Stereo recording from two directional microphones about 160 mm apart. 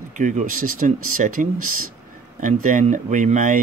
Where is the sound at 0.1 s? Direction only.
50° right (ahead or behind).